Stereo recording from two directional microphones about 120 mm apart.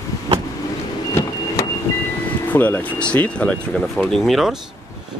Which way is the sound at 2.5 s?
15° left (ahead or behind).